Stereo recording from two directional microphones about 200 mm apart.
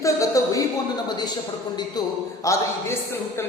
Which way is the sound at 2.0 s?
20° left (ahead or behind).